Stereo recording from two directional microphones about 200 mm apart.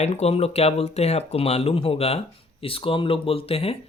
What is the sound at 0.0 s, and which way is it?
Speech, 30° left (ahead or behind).